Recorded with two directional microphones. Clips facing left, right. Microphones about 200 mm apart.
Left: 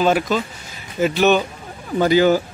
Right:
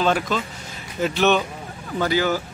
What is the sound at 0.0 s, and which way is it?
Speech, 5° left (ahead or behind).